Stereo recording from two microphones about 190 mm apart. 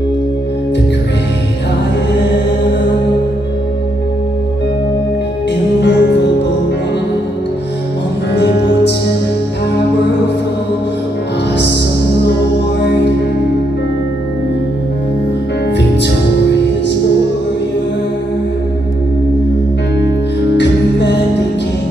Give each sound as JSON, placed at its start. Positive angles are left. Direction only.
{"t": 5.8, "sound": "music", "side_deg": 60}
{"t": 20.5, "sound": "music", "side_deg": 65}